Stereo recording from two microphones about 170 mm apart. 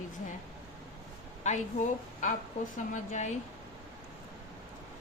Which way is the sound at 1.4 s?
40° left (ahead or behind).